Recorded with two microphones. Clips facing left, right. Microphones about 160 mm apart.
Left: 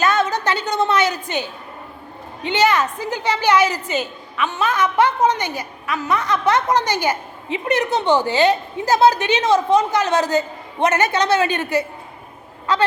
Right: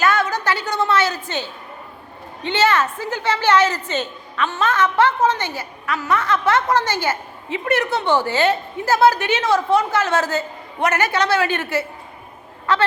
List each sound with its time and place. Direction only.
0.0 s a woman's voice: 20° left (ahead or behind)